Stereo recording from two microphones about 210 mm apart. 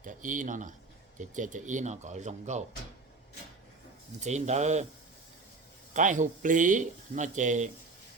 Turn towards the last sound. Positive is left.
turn(degrees=-35)  # may be behind; listen again after turning